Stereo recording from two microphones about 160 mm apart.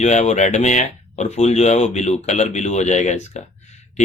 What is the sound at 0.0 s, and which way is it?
Speech, 45° left (ahead or behind).